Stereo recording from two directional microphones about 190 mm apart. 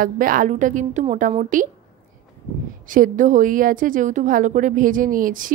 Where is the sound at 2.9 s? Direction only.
45° right (ahead or behind).